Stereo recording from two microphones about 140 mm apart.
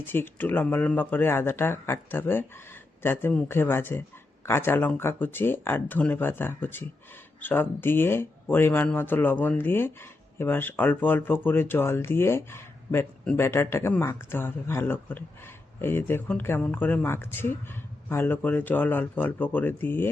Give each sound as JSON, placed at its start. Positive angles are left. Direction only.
{"t": 0.0, "sound": "speech", "side_deg": 15}